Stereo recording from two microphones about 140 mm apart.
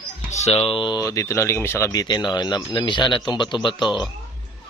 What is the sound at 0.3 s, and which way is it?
Speech, 55° left (ahead or behind).